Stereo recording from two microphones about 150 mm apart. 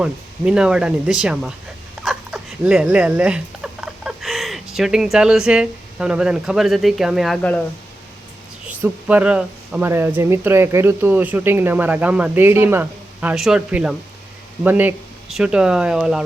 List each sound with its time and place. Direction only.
0.0 s speech: 5° right (ahead or behind)
8.6 s speech: 10° right (ahead or behind)